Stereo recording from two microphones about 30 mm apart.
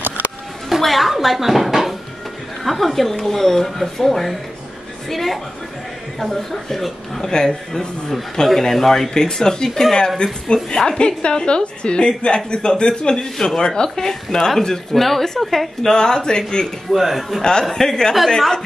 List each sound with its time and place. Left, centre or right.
0.7 s a sound: centre
2.6 s speech: centre
7.2 s a man's voice: left
8.6 s speech: centre
9.1 s a man's voice: left
15.0 s speech: centre
15.8 s a man's voice: left
16.9 s speech: centre
17.4 s a man's voice: left